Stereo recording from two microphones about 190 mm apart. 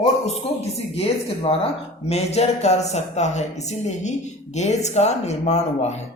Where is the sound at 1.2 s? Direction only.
30° left (ahead or behind).